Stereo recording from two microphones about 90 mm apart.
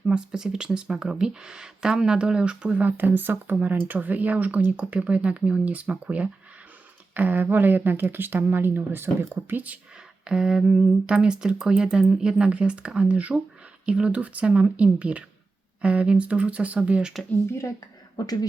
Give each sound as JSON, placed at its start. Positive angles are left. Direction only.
{"t": 0.0, "sound": "speech", "side_deg": -10}
{"t": 10.2, "sound": "speech", "side_deg": -10}
{"t": 17.5, "sound": "speech", "side_deg": 30}
{"t": 18.2, "sound": "speech", "side_deg": 45}